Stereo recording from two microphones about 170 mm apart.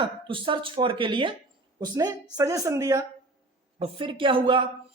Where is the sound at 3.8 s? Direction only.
30° right (ahead or behind).